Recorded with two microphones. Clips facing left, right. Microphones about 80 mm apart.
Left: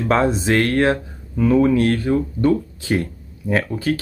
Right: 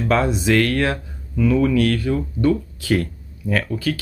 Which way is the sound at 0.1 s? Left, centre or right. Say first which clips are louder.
Left 1 dB; left.